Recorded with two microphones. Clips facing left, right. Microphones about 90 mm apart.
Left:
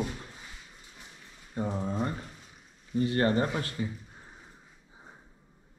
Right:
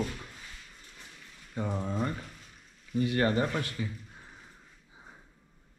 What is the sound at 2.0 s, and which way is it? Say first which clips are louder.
Speech: left 1 dB; 15° left (ahead or behind).